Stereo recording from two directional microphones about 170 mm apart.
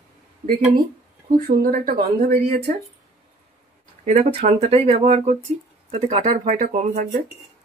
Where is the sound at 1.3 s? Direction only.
55° right (ahead or behind).